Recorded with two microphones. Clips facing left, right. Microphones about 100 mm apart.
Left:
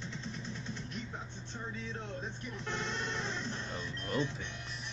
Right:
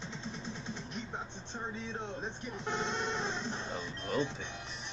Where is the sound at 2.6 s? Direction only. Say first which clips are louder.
Right 3 dB; 20° right (ahead or behind).